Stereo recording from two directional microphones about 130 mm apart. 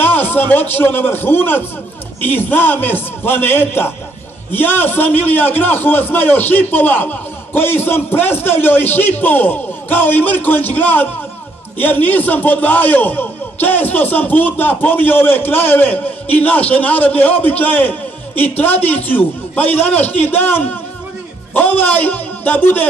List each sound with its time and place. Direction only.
0.0 s a man's voice: 15° left (ahead or behind)